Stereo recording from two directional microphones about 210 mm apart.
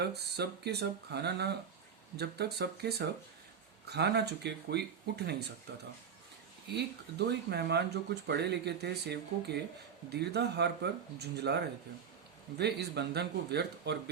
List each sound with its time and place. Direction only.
0.0 s speech: 50° right (ahead or behind)
6.7 s speech: 50° right (ahead or behind)